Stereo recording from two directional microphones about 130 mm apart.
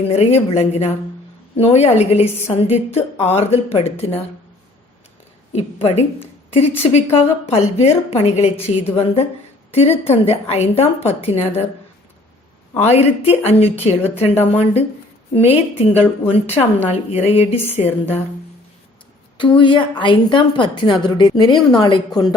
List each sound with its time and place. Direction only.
0.1 s a woman's voice: 55° left (ahead or behind)
5.5 s a woman's voice: 55° left (ahead or behind)
12.8 s a woman's voice: 55° left (ahead or behind)
19.4 s a woman's voice: 40° left (ahead or behind)